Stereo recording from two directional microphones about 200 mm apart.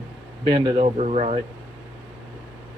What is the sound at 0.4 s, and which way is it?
Speech, 20° right (ahead or behind).